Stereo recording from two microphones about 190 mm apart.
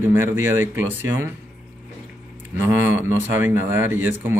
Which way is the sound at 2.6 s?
10° right (ahead or behind).